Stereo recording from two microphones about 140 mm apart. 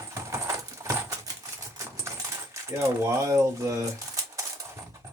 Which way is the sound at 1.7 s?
20° right (ahead or behind).